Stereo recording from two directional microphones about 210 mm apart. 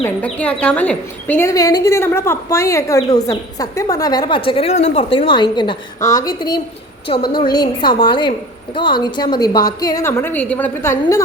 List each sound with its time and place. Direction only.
0.0 s a woman's voice: 5° left (ahead or behind)